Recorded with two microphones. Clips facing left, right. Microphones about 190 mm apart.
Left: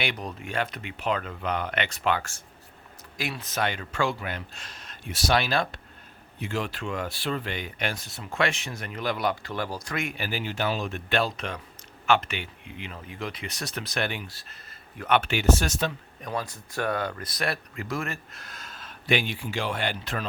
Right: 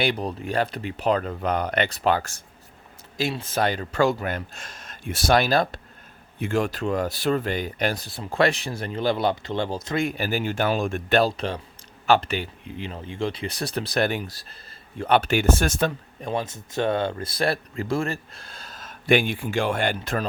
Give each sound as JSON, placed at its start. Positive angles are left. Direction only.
{"t": 0.0, "sound": "speech", "side_deg": -35}
{"t": 3.2, "sound": "speech", "side_deg": -25}
{"t": 16.2, "sound": "speech", "side_deg": -25}